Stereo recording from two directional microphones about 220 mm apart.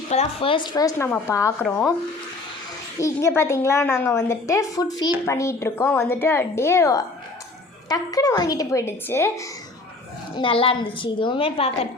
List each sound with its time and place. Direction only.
0.1 s a woman's voice: 25° left (ahead or behind)
3.0 s a woman's voice: 15° left (ahead or behind)
10.3 s a woman's voice: 25° left (ahead or behind)